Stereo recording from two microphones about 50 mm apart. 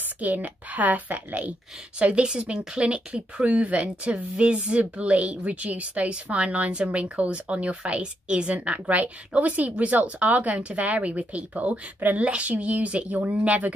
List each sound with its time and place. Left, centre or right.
0.2 s a woman's voice: right
2.0 s speech: right